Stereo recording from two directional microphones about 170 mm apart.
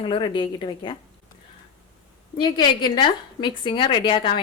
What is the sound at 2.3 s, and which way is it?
A woman's voice, 25° left (ahead or behind).